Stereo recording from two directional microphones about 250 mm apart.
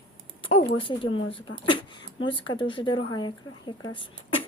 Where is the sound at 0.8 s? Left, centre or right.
Left.